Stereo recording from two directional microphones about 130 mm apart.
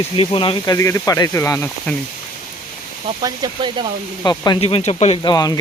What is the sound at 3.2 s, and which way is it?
Speech, 35° right (ahead or behind).